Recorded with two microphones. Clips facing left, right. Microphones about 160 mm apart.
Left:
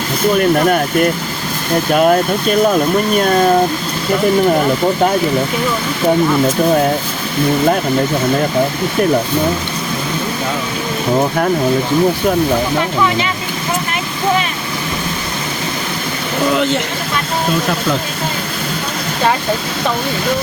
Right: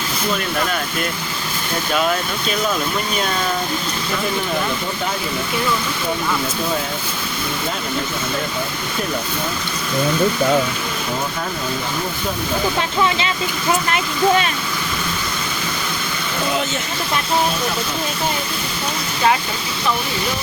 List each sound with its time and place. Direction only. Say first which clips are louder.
0.3 s speech: left 10 dB; 50° left (ahead or behind)